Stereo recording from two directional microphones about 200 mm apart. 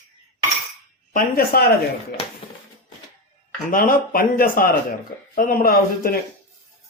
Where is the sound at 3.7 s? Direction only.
45° left (ahead or behind).